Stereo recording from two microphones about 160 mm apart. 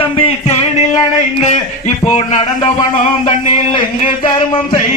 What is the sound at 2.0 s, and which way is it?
Speech, 45° left (ahead or behind).